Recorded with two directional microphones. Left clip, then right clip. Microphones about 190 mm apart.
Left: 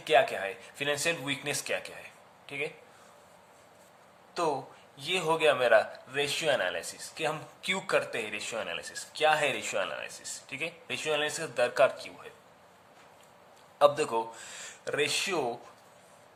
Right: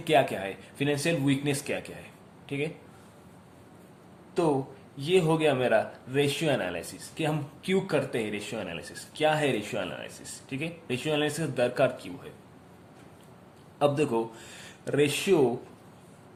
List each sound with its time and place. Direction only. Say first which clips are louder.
0.0 s speech: right 1 dB; 10° left (ahead or behind)
0.8 s speech: right 2 dB; 25° left (ahead or behind)
4.9 s speech: right 4 dB; 20° left (ahead or behind)
13.7 s speech: left 1 dB; 25° left (ahead or behind)